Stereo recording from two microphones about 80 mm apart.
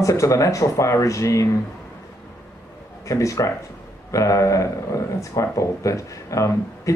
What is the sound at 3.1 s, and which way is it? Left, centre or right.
Speech, left.